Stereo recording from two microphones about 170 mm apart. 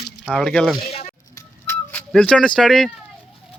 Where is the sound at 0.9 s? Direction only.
35° left (ahead or behind).